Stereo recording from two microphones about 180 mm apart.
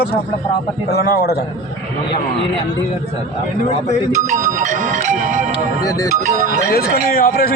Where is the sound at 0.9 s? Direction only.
60° left (ahead or behind).